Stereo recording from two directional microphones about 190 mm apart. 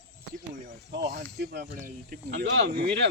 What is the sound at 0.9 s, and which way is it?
Speech, 55° right (ahead or behind).